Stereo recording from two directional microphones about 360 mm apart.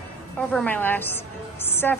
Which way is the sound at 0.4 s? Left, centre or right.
Centre.